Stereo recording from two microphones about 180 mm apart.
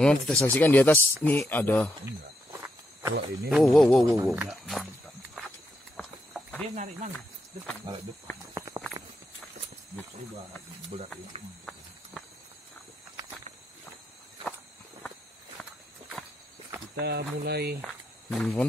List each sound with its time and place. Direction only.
0.0 s speech: 5° left (ahead or behind)
3.4 s speech: centre (ahead or behind)
5.9 s clip-clop: 5° left (ahead or behind)
6.7 s speech: 40° right (ahead or behind)
8.5 s walk: 15° right (ahead or behind)
16.9 s speech: 65° right (ahead or behind)
17.8 s speech: centre (ahead or behind)